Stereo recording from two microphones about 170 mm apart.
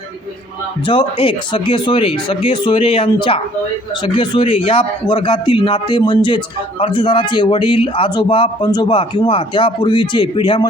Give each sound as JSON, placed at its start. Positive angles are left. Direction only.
{"t": 0.9, "sound": "a man's voice", "side_deg": 30}